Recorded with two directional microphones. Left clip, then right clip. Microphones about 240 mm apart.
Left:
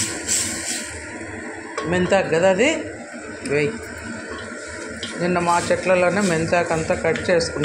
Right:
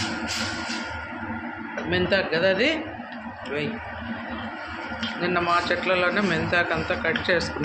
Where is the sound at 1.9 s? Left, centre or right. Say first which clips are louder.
Left 4 dB; left.